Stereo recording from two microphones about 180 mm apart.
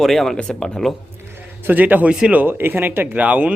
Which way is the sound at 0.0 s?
Centre (ahead or behind).